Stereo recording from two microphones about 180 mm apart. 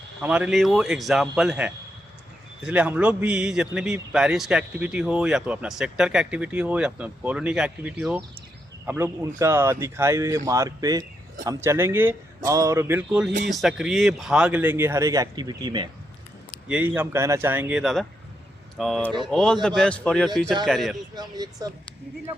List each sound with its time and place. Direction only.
0.2 s a man's voice: 5° right (ahead or behind); by 15.9 s 25° right (ahead or behind)
16.6 s a man's voice: 10° right (ahead or behind)
21.2 s speech: 20° right (ahead or behind)